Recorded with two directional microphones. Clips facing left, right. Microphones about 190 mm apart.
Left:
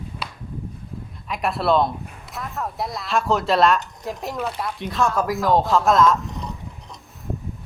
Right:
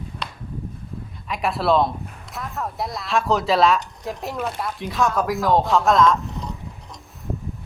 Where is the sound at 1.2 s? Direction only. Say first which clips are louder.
Even; centre (ahead or behind).